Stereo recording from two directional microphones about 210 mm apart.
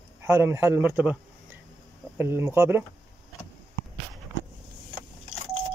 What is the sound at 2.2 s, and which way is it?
Speech, 10° right (ahead or behind).